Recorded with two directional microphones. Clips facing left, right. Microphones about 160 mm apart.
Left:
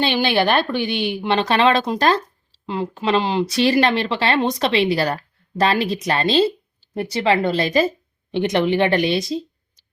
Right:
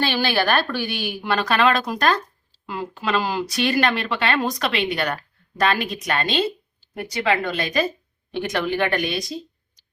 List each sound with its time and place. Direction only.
0.0 s speech: 20° left (ahead or behind)